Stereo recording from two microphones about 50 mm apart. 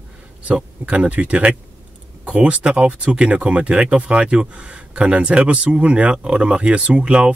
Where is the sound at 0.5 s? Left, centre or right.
Right.